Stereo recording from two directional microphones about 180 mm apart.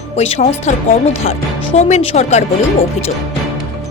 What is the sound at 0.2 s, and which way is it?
Speech, 35° left (ahead or behind).